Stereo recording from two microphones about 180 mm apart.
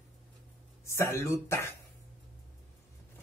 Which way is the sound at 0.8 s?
15° left (ahead or behind).